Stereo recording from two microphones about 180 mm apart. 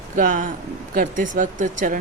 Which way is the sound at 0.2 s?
45° right (ahead or behind).